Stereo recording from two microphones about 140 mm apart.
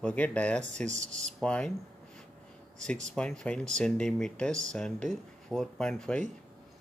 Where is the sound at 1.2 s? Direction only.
5° left (ahead or behind).